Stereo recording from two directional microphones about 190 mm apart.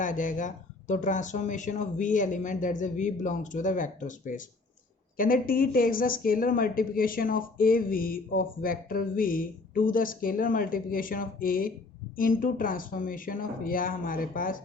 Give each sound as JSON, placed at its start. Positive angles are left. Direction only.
{"t": 0.0, "sound": "a woman's voice", "side_deg": 45}